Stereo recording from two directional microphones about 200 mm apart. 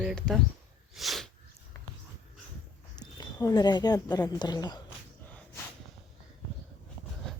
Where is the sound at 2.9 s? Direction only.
20° left (ahead or behind).